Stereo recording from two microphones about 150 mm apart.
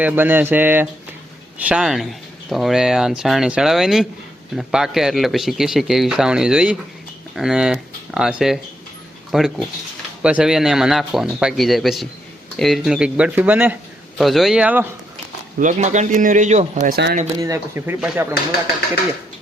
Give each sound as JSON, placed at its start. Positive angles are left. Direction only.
{"t": 0.0, "sound": "speech", "side_deg": -15}
{"t": 14.2, "sound": "speech", "side_deg": 0}
{"t": 15.5, "sound": "speech", "side_deg": -55}
{"t": 17.4, "sound": "speech", "side_deg": -20}